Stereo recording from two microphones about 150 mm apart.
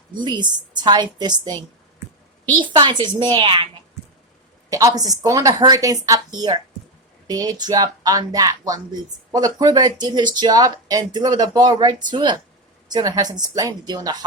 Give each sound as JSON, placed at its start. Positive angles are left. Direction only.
{"t": 0.2, "sound": "a woman's voice", "side_deg": -30}
{"t": 4.7, "sound": "speech", "side_deg": -25}